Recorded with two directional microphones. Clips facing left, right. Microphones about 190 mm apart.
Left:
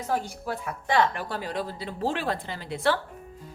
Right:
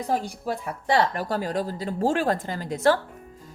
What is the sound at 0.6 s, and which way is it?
Speech, 40° right (ahead or behind).